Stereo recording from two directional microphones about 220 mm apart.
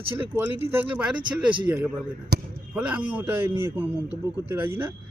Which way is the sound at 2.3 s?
45° right (ahead or behind).